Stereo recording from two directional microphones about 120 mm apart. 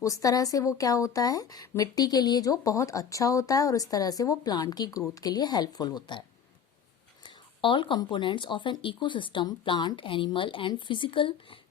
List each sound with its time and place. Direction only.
0.0 s a woman's voice: 30° left (ahead or behind)
7.3 s speech: 45° left (ahead or behind)